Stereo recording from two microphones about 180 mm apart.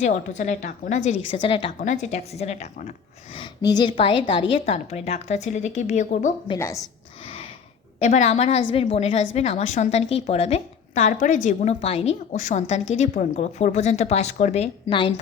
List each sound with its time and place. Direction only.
0.0 s a woman's voice: 40° left (ahead or behind)
1.8 s a woman's voice: 45° left (ahead or behind)
3.3 s a woman's voice: 20° left (ahead or behind); by 6.3 s 45° left (ahead or behind)
6.6 s a woman's voice: 15° left (ahead or behind)
7.9 s a woman's voice: 40° left (ahead or behind)